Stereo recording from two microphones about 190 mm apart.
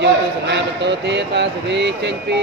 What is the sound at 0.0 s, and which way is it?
Speech, 65° right (ahead or behind).